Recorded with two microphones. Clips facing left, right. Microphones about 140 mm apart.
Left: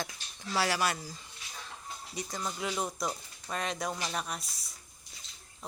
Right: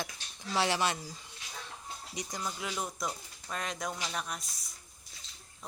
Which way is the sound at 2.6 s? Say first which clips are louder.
Left 5 dB; 5° left (ahead or behind).